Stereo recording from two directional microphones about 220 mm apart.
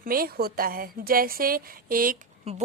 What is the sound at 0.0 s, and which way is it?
A woman's voice, 40° right (ahead or behind).